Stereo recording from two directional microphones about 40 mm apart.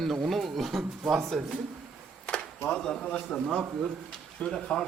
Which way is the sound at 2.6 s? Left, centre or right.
Left.